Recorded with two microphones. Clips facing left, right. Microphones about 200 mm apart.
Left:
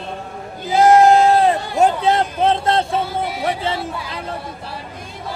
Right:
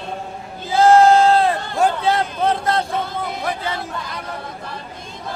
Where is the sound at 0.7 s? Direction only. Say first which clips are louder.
Left 1 dB; 20° left (ahead or behind).